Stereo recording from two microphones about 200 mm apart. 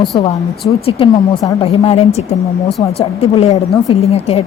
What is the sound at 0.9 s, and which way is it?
A woman's voice, 25° left (ahead or behind).